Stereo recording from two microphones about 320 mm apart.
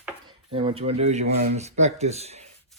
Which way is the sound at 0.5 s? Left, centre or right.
Centre.